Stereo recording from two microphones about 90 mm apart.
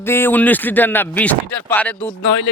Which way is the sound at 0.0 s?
25° left (ahead or behind).